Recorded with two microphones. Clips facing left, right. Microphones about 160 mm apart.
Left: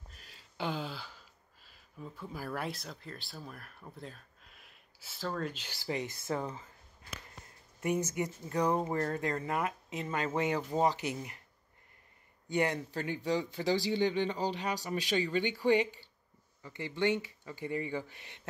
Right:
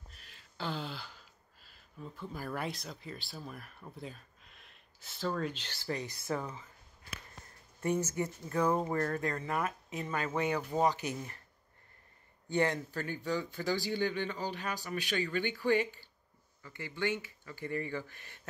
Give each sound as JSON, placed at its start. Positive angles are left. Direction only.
{"t": 0.2, "sound": "a sound", "side_deg": 30}
{"t": 0.6, "sound": "speech", "side_deg": 10}
{"t": 7.8, "sound": "speech", "side_deg": 15}
{"t": 12.4, "sound": "speech", "side_deg": 20}